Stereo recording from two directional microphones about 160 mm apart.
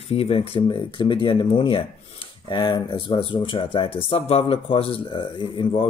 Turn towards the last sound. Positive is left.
turn(degrees=35)  # may be behind; listen again after turning